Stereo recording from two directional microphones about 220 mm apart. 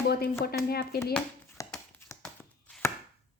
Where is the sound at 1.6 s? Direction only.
15° left (ahead or behind).